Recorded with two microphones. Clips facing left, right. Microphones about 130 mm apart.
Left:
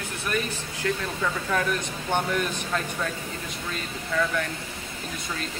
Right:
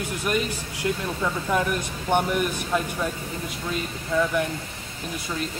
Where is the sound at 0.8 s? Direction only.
15° right (ahead or behind).